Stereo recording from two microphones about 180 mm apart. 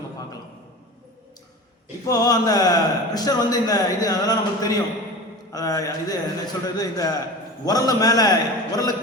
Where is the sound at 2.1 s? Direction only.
20° left (ahead or behind).